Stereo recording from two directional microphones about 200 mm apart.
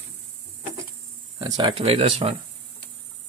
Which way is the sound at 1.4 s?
20° right (ahead or behind).